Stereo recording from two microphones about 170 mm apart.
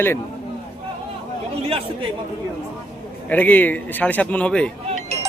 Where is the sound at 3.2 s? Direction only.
10° left (ahead or behind).